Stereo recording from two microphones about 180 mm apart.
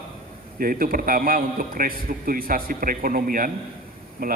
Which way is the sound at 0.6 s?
50° right (ahead or behind).